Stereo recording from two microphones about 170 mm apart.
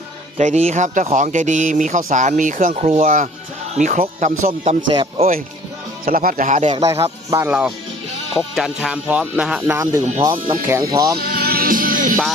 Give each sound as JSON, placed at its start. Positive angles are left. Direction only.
{"t": 0.3, "sound": "speech", "side_deg": -40}
{"t": 6.1, "sound": "speech", "side_deg": -55}
{"t": 6.8, "sound": "speech", "side_deg": -20}
{"t": 11.2, "sound": "music", "side_deg": -65}